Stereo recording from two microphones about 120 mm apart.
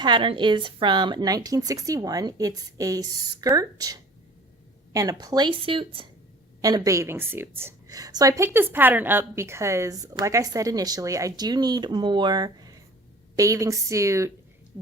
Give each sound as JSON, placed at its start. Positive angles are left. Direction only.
{"t": 0.0, "sound": "speech", "side_deg": -40}
{"t": 4.9, "sound": "speech", "side_deg": -30}
{"t": 6.6, "sound": "a woman's voice", "side_deg": -30}
{"t": 7.9, "sound": "a woman's voice", "side_deg": -30}
{"t": 8.5, "sound": "a woman's voice", "side_deg": -15}